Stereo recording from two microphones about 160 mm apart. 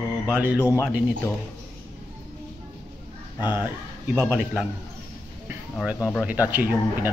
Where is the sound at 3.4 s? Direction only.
25° left (ahead or behind).